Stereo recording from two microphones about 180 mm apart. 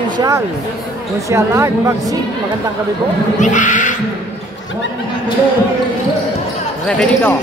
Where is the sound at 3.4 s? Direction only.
45° left (ahead or behind).